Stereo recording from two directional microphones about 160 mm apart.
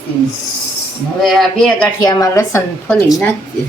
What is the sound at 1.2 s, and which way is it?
Speech, centre (ahead or behind).